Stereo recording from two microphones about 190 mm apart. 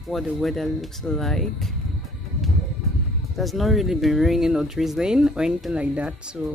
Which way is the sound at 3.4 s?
Centre (ahead or behind).